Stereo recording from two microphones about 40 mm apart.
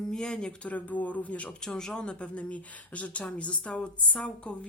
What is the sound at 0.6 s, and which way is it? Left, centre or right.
Speech, left.